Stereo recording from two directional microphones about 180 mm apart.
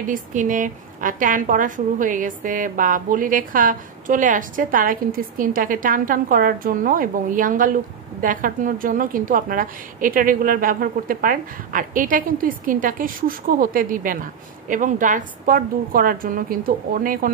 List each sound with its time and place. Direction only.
0.0 s speech: 45° right (ahead or behind)